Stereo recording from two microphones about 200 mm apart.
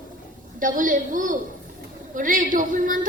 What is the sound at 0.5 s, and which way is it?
A woman's voice, 40° right (ahead or behind).